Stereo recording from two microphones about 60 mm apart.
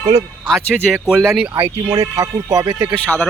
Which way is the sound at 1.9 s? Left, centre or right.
Right.